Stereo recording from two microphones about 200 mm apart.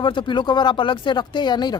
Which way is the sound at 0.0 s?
25° left (ahead or behind).